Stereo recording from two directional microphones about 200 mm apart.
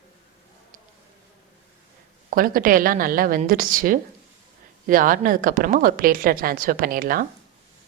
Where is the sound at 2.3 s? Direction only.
45° right (ahead or behind).